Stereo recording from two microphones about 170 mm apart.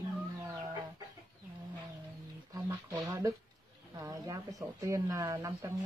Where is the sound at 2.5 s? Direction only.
20° right (ahead or behind).